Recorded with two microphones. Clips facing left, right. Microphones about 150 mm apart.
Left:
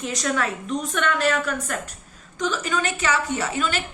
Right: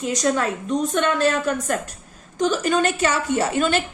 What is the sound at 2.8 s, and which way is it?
Speech, 55° right (ahead or behind).